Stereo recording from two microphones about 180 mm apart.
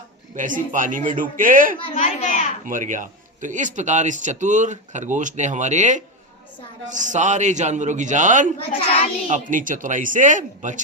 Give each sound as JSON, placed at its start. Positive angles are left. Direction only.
{"t": 0.3, "sound": "a man's voice", "side_deg": -45}
{"t": 1.8, "sound": "a woman's voice", "side_deg": 40}
{"t": 2.6, "sound": "a man's voice", "side_deg": -45}
{"t": 8.5, "sound": "a woman's voice", "side_deg": 30}
{"t": 9.2, "sound": "a man's voice", "side_deg": -45}